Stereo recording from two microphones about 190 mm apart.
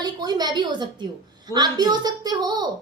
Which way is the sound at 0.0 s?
20° right (ahead or behind).